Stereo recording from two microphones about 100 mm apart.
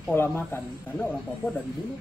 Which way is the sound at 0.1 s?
20° left (ahead or behind).